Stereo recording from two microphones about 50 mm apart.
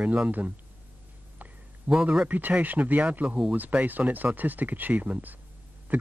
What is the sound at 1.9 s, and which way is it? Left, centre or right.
Speech, right.